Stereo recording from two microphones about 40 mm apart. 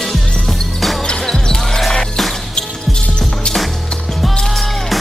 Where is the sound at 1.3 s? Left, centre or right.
Centre.